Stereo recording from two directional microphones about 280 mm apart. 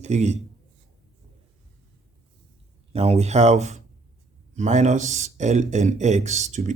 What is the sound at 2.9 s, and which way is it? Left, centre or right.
Speech, right.